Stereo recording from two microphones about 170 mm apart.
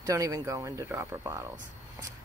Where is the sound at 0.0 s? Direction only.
20° right (ahead or behind).